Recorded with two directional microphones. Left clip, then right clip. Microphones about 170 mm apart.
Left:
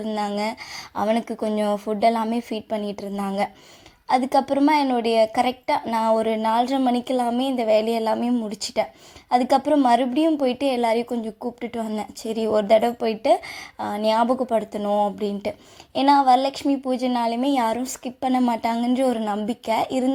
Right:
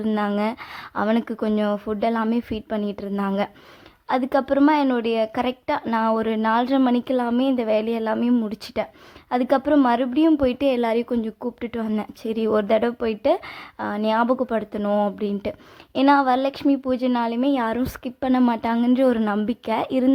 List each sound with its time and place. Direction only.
0.9 s a woman's voice: 10° right (ahead or behind)
14.8 s speech: 20° right (ahead or behind)
15.2 s a woman's voice: 10° right (ahead or behind)